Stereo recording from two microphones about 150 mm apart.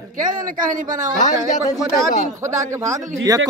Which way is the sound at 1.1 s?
55° left (ahead or behind).